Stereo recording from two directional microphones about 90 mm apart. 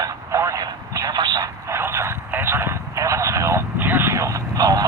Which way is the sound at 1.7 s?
30° right (ahead or behind).